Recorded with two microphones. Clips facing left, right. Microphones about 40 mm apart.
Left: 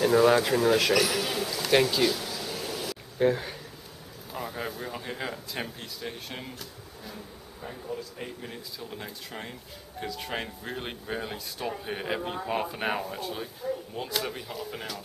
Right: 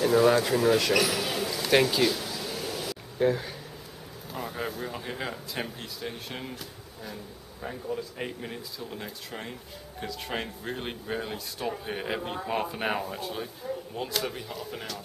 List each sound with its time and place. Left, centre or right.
0.0 s speech: centre
0.9 s a sound: centre
3.3 s speech: centre
8.2 s speech: right
8.7 s speech: centre